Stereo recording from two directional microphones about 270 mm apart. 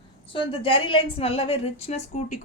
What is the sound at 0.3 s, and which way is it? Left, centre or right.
A woman's voice, centre.